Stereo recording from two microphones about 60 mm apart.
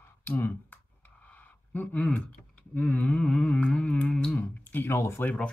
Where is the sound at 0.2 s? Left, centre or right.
Left.